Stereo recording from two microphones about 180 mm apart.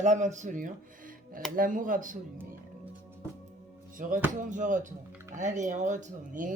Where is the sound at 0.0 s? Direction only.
40° right (ahead or behind).